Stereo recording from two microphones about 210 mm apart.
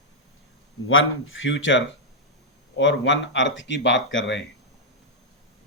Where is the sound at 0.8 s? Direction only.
65° left (ahead or behind).